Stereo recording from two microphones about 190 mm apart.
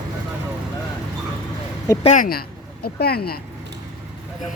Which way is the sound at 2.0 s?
45° left (ahead or behind).